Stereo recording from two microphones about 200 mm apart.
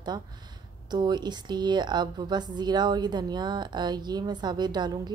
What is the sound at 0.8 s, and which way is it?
A woman's voice, 20° right (ahead or behind).